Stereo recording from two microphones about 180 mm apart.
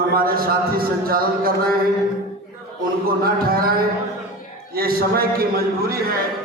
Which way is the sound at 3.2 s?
55° right (ahead or behind).